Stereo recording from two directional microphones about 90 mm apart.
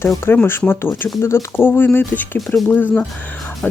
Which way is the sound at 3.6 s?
15° left (ahead or behind).